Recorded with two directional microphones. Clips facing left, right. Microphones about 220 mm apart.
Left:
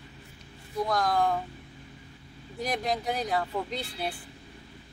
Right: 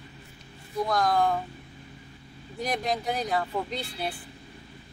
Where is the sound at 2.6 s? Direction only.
5° left (ahead or behind).